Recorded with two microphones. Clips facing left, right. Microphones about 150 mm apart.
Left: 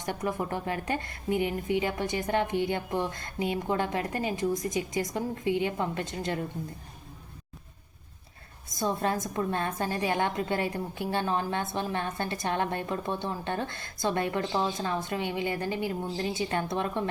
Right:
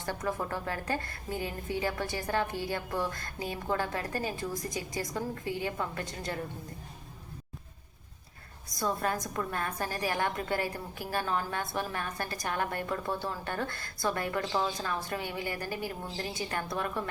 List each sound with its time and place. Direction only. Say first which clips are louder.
0.0 s a woman's voice: left 2 dB; 20° left (ahead or behind)
8.8 s a woman's voice: left 3 dB; 25° left (ahead or behind)